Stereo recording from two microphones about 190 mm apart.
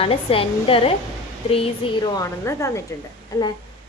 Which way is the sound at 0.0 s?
30° left (ahead or behind).